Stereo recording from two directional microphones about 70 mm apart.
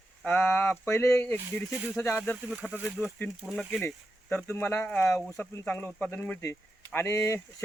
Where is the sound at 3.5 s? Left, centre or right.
Centre.